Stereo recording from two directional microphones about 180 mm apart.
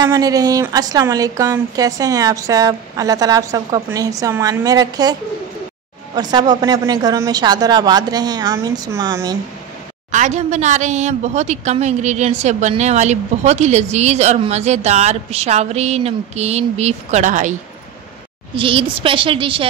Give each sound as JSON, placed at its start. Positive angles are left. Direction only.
{"t": 0.0, "sound": "speech", "side_deg": -20}
{"t": 6.1, "sound": "speech", "side_deg": -25}
{"t": 10.1, "sound": "a woman's voice", "side_deg": -40}
{"t": 18.6, "sound": "speech", "side_deg": -30}